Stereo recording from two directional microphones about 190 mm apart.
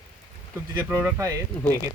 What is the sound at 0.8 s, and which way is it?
Speech, 15° right (ahead or behind).